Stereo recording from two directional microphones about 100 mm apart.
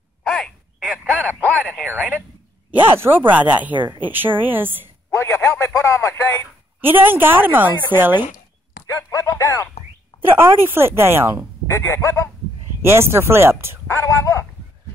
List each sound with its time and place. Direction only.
0.2 s a sound: 5° left (ahead or behind)
1.1 s radio: 20° right (ahead or behind)
1.9 s a woman's voice: 15° right (ahead or behind)
5.1 s speech: 25° left (ahead or behind)
6.8 s a woman's voice: 20° right (ahead or behind)
8.8 s a sound: 30° left (ahead or behind)
9.3 s speech: 30° left (ahead or behind)
10.3 s a woman's voice: 25° right (ahead or behind)
11.7 s speech: 25° left (ahead or behind)
12.8 s a woman's voice: 25° right (ahead or behind)
13.8 s speech: 25° left (ahead or behind)